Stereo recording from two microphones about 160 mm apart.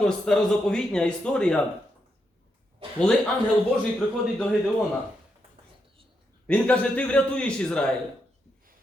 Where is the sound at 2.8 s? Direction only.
35° right (ahead or behind).